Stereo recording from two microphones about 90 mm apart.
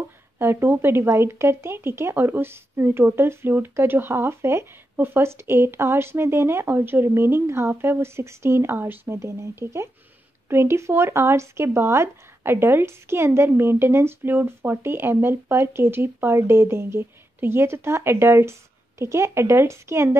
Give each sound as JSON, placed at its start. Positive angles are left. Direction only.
{"t": 0.4, "sound": "speech", "side_deg": -25}